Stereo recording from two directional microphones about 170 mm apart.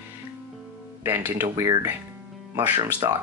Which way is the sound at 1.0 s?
15° right (ahead or behind).